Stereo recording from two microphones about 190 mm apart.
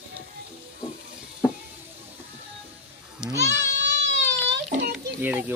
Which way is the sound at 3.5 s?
70° right (ahead or behind).